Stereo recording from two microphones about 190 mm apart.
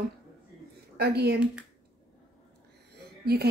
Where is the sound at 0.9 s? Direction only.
60° right (ahead or behind).